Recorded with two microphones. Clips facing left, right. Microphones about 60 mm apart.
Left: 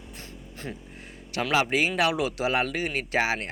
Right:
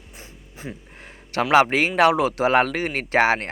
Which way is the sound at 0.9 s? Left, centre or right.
Right.